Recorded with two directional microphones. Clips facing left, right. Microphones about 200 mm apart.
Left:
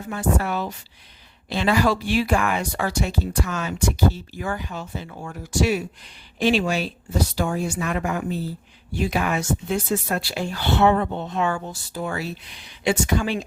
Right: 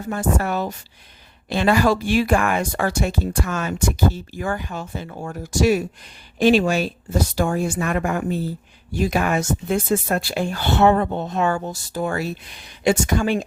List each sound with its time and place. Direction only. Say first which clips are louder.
0.1 s speech: right 2 dB; 45° right (ahead or behind)